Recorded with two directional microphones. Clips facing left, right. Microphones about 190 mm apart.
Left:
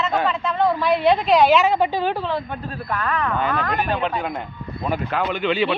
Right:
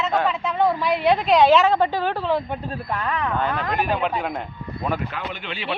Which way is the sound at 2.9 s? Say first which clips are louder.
Left 2 dB; 20° right (ahead or behind).